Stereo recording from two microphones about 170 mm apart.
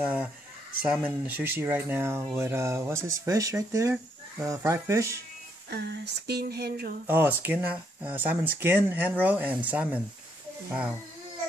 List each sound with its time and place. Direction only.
0.0 s speech: 5° right (ahead or behind)
5.7 s speech: 75° right (ahead or behind)
7.1 s speech: 10° right (ahead or behind)